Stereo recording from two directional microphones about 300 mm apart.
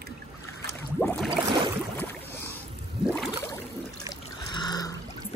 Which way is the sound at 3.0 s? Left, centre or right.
Centre.